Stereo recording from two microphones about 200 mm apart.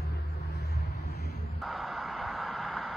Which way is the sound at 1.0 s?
50° left (ahead or behind).